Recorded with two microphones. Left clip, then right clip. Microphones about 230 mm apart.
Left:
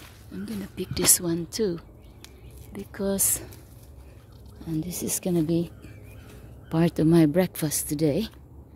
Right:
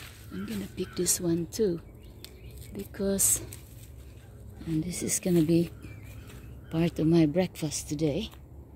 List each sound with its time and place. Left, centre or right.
0.3 s a woman's voice: centre
4.7 s speech: centre
6.7 s a woman's voice: centre